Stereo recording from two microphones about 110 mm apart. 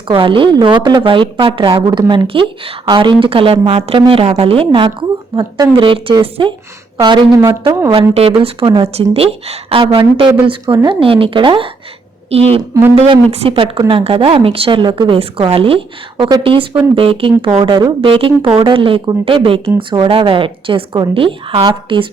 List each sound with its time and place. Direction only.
0.1 s a woman's voice: 50° right (ahead or behind)
7.3 s speech: 30° right (ahead or behind)
8.1 s a woman's voice: 65° right (ahead or behind)
12.3 s a woman's voice: 65° right (ahead or behind); by 15.2 s 45° right (ahead or behind)
15.2 s a woman's voice: 60° right (ahead or behind)